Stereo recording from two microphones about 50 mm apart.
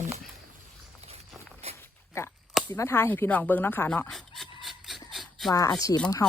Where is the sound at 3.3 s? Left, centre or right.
Left.